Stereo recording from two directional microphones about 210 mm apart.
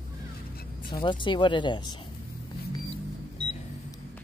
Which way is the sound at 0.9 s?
20° left (ahead or behind).